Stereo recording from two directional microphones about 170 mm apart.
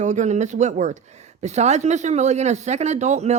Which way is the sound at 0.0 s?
45° right (ahead or behind).